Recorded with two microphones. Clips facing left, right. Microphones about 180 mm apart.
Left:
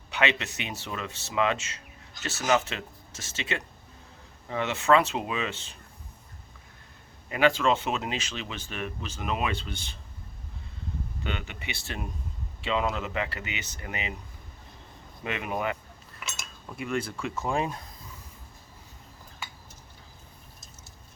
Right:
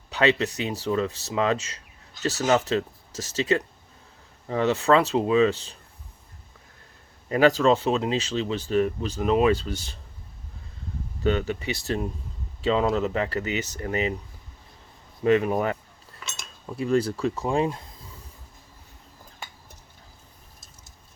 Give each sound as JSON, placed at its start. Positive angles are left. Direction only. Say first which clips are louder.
{"t": 0.1, "sound": "speech", "louder": "right 6 dB", "side_deg": -35}
{"t": 7.3, "sound": "speech", "louder": "right 5 dB", "side_deg": -35}
{"t": 11.2, "sound": "speech", "louder": "right 14 dB", "side_deg": -40}
{"t": 15.2, "sound": "speech", "louder": "right 10 dB", "side_deg": -35}